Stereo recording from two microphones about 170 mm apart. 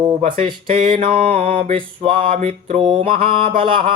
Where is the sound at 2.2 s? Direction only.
50° right (ahead or behind).